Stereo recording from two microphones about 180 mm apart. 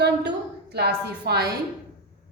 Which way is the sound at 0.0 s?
70° right (ahead or behind).